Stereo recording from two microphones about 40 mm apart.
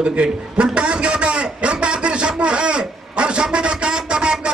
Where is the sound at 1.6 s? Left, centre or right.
Right.